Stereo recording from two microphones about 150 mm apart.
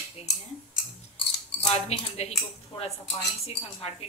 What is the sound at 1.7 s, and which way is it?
Speech, 45° left (ahead or behind).